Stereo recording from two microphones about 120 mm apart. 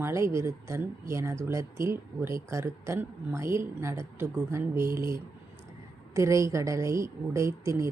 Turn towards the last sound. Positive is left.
turn(degrees=-25)  # may be behind; listen again after turning